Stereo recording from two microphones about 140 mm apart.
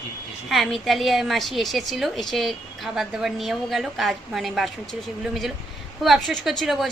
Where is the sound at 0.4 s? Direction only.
Centre (ahead or behind).